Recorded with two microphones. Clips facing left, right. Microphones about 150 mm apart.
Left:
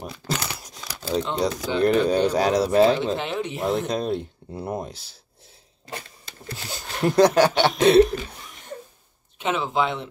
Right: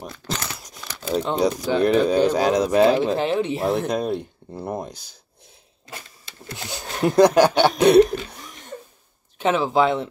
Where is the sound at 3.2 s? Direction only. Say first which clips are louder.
Right 6 dB; 35° right (ahead or behind).